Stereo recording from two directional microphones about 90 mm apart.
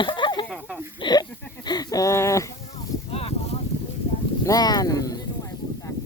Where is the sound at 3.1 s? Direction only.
90° left.